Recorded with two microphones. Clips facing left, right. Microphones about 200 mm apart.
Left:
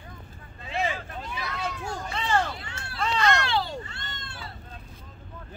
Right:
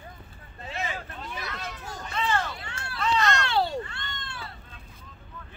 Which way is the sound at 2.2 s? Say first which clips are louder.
Left 3 dB; 30° left (ahead or behind).